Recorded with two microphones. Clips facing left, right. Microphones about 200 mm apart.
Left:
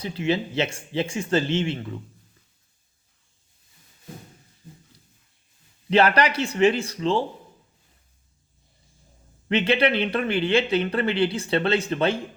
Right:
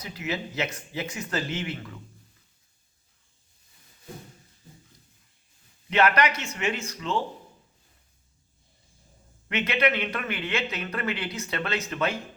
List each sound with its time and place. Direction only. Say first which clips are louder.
0.0 s speech: left 8 dB; 30° left (ahead or behind)
5.9 s speech: left 3 dB; 30° left (ahead or behind)
9.5 s speech: left 5 dB; 30° left (ahead or behind)